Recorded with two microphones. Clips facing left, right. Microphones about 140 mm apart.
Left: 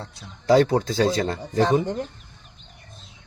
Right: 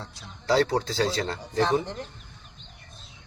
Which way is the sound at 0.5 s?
50° left (ahead or behind).